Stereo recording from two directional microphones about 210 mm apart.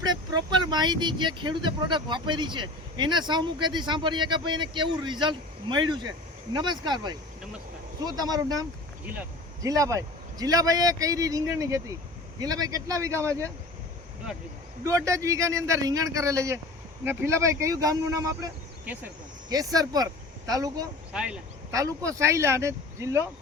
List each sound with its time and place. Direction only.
0.0 s a man's voice: 20° right (ahead or behind)
9.6 s a man's voice: 15° right (ahead or behind)
14.8 s a man's voice: 15° right (ahead or behind)
21.1 s speech: 5° right (ahead or behind)
21.7 s a man's voice: 15° right (ahead or behind)